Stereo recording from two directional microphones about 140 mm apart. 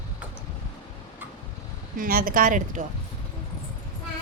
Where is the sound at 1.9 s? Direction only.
90° right; by 2.8 s 65° right (ahead or behind).